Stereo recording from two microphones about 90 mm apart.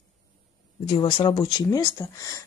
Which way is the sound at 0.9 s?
90° left.